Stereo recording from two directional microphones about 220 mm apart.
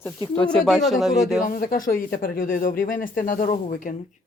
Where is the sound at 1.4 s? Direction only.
40° left (ahead or behind).